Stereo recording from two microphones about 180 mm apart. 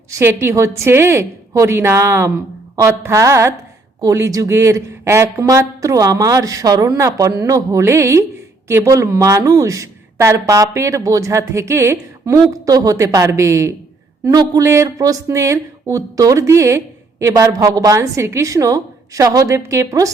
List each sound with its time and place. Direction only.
0.1 s speech: 15° right (ahead or behind)